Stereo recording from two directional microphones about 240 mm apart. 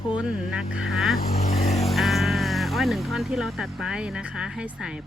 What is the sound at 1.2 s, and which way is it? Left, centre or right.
Speech, left.